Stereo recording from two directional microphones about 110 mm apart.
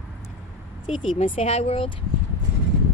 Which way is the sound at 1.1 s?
60° left (ahead or behind).